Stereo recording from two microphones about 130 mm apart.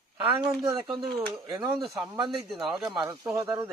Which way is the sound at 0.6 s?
35° right (ahead or behind).